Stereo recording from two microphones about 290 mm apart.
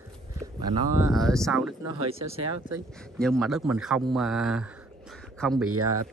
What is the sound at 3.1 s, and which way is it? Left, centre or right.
A man's voice, centre.